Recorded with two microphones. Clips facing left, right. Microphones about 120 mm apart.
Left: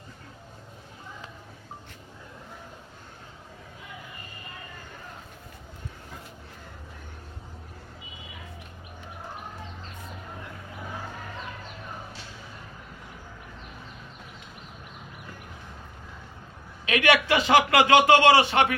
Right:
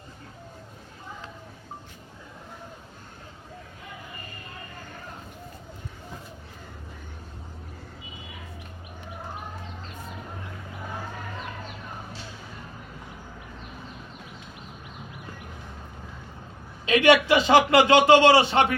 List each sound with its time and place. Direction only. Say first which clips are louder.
16.8 s a man's voice: right 4 dB; 25° right (ahead or behind)